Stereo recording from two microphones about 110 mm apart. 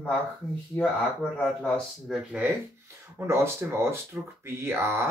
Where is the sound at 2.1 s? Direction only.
10° right (ahead or behind).